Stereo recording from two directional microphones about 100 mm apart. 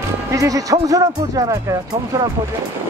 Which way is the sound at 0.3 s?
35° right (ahead or behind).